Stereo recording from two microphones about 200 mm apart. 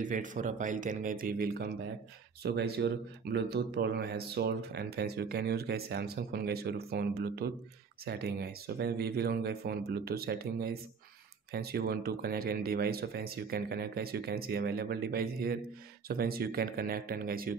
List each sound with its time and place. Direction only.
0.0 s speech: 40° right (ahead or behind)